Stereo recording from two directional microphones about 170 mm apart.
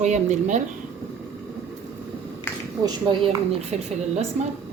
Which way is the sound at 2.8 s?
35° right (ahead or behind).